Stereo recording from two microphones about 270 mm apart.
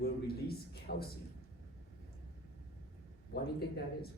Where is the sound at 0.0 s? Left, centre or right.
Left.